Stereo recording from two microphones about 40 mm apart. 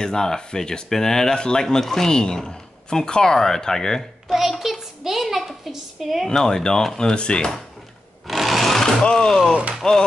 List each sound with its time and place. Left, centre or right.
0.0 s speech: centre
4.3 s a child's voice: centre
6.2 s speech: centre
8.3 s sewing machine: centre
8.8 s speech: centre